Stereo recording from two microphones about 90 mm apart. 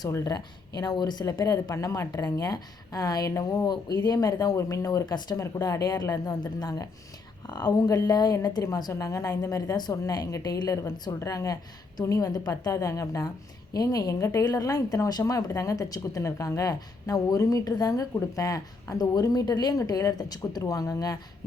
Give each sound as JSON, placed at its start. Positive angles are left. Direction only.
{"t": 0.1, "sound": "speech", "side_deg": 35}
{"t": 0.3, "sound": "a woman's voice", "side_deg": 50}
{"t": 1.7, "sound": "a woman's voice", "side_deg": 35}
{"t": 5.0, "sound": "a woman's voice", "side_deg": 50}